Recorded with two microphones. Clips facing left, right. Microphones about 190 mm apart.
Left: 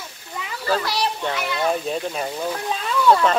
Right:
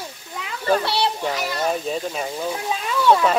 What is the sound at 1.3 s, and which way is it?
Speech, 40° right (ahead or behind).